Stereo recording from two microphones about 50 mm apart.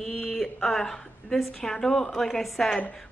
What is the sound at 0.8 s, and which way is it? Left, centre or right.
A woman's voice, centre.